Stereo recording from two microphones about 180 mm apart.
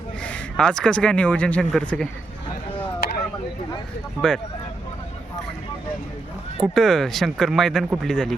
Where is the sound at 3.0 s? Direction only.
60° left (ahead or behind).